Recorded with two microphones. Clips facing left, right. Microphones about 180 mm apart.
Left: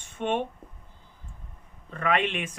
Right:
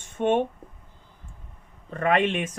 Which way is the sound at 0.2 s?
45° right (ahead or behind).